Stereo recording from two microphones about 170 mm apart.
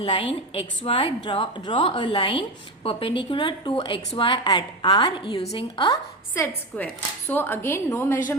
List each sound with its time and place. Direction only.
0.0 s a woman's voice: 30° left (ahead or behind)
6.3 s a woman's voice: 10° left (ahead or behind)